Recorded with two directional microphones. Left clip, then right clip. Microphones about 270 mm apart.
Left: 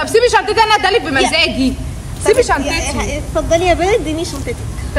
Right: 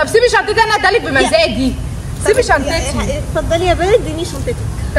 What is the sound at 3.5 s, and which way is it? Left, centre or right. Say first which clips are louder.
Speech: even; left.